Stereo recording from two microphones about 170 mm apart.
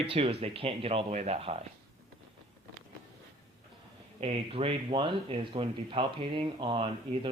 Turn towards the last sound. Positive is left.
turn(degrees=-30)  # may be behind; listen again after turning